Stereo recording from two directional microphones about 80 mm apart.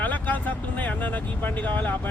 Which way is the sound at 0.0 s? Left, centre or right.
Left.